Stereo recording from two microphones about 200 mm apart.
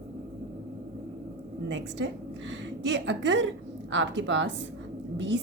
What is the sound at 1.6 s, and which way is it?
A woman's voice, 65° right (ahead or behind).